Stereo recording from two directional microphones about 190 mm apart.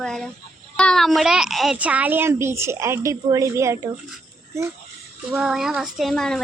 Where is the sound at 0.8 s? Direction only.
5° left (ahead or behind); by 3.8 s 15° right (ahead or behind).